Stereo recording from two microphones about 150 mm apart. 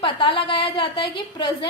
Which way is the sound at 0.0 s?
35° left (ahead or behind).